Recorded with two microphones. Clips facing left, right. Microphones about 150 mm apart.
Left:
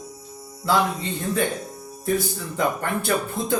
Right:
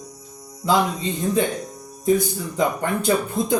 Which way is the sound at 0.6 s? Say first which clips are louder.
Right 2 dB; 20° right (ahead or behind).